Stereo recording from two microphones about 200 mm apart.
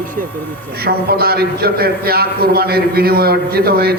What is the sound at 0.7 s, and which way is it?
A man's voice, 50° right (ahead or behind).